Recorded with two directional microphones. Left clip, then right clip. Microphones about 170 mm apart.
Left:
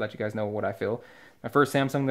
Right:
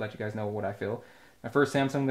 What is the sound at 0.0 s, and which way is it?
Speech, 45° left (ahead or behind).